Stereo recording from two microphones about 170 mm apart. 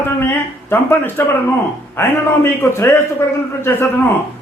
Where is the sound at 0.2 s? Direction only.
15° left (ahead or behind).